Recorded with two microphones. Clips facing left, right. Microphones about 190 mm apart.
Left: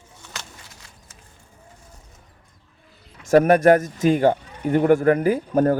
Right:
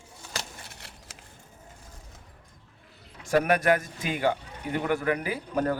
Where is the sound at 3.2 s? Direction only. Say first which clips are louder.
Left 9 dB; 45° left (ahead or behind).